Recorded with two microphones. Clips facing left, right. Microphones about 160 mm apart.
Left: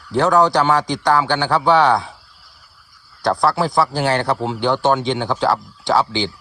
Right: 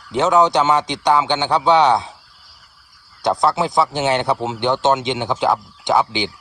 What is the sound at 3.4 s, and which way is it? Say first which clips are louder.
Speech: even; 20° right (ahead or behind).